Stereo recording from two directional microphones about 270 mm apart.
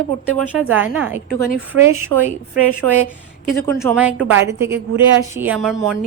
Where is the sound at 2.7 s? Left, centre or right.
Right.